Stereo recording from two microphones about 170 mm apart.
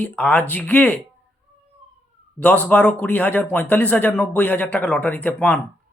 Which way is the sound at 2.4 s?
10° left (ahead or behind).